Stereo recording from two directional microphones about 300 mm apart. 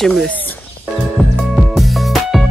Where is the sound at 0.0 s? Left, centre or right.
Centre.